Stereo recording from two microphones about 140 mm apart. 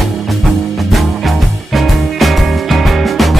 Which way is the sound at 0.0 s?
Centre (ahead or behind).